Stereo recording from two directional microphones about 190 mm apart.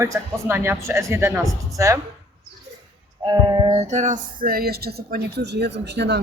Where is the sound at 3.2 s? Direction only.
20° right (ahead or behind); by 6.1 s 60° right (ahead or behind).